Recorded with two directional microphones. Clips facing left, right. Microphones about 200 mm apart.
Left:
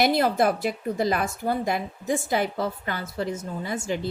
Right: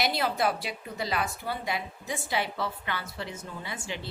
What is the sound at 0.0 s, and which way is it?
A woman's voice, 50° left (ahead or behind).